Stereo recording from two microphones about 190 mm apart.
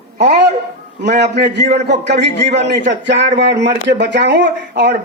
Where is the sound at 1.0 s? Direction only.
65° right (ahead or behind).